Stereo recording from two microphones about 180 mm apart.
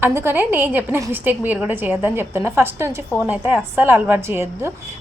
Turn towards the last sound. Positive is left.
turn(degrees=-15)  # may be behind; listen again after turning